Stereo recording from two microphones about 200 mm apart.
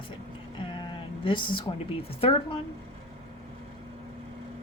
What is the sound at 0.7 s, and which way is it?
Sheep, 25° left (ahead or behind).